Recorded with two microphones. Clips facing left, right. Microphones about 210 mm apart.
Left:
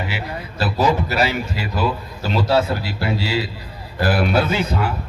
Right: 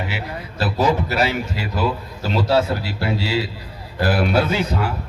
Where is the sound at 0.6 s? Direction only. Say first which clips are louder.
Even; 25° right (ahead or behind).